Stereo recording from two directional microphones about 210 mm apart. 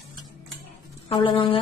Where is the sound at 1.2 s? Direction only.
25° left (ahead or behind).